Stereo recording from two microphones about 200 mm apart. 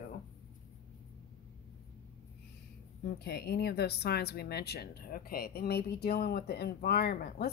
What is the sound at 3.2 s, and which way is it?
Speech, 50° left (ahead or behind).